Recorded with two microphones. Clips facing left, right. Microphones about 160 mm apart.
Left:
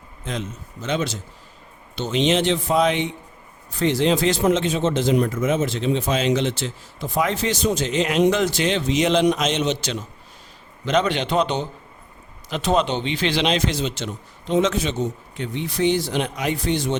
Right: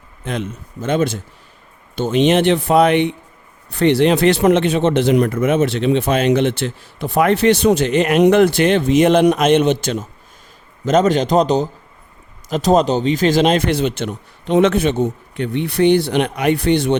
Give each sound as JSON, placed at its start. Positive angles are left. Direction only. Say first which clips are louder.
{"t": 0.3, "sound": "a man's voice", "louder": "right 5 dB", "side_deg": -60}